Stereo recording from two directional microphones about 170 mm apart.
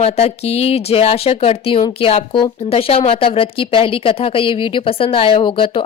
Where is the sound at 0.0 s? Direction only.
35° left (ahead or behind).